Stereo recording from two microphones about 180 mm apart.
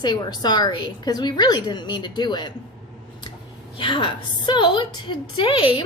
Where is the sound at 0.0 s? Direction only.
25° left (ahead or behind).